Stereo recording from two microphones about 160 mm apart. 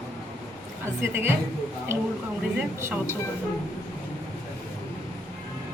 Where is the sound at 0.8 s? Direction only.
15° right (ahead or behind).